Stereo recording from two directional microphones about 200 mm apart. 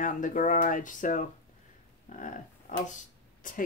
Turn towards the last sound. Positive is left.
turn(degrees=40)  # may be behind; listen again after turning